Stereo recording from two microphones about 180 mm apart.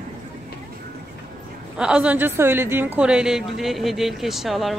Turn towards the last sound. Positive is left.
turn(degrees=0)  # may be behind; listen again after turning